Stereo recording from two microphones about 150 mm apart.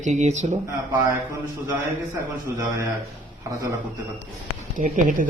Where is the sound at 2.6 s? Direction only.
20° right (ahead or behind).